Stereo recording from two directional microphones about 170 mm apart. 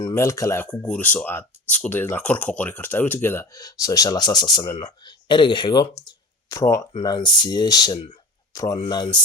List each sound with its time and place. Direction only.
0.0 s speech: 15° left (ahead or behind)
6.1 s a sound: 20° left (ahead or behind)
6.9 s speech: 25° left (ahead or behind)